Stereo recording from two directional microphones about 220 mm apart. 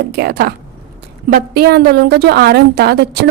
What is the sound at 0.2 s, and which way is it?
A woman's voice, 45° right (ahead or behind).